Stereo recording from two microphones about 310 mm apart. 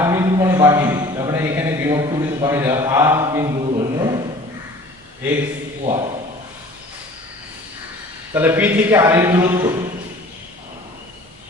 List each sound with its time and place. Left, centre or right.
0.0 s a man's voice: centre
5.8 s a man's voice: centre
8.3 s a man's voice: centre